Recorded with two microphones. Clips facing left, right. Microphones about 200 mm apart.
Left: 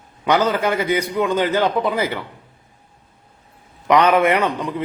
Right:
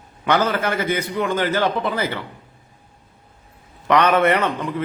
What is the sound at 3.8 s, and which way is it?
A man's voice, 15° left (ahead or behind).